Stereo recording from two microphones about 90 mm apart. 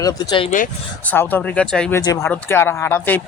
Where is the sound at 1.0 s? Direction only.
20° left (ahead or behind).